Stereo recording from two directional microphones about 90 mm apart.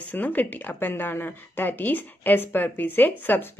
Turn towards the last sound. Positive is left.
turn(degrees=20)  # may be behind; listen again after turning